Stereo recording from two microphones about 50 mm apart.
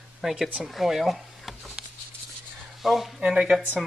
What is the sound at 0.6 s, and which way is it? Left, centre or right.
Speech, centre.